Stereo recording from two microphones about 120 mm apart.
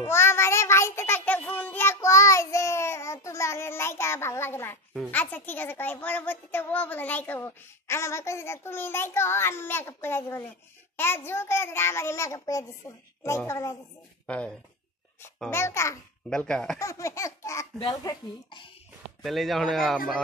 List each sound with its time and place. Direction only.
0.0 s child singing: 20° left (ahead or behind)
5.1 s a child's voice: 15° left (ahead or behind)
14.2 s speech: 10° left (ahead or behind)
15.5 s a child's voice: 25° left (ahead or behind)
16.3 s speech: 5° left (ahead or behind)
16.7 s a child's voice: 25° left (ahead or behind)
17.7 s speech: 35° left (ahead or behind)
19.2 s speech: centre (ahead or behind)